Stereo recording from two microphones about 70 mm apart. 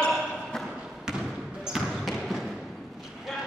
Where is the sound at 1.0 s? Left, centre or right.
Centre.